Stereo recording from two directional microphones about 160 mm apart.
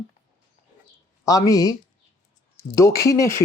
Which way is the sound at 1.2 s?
20° left (ahead or behind).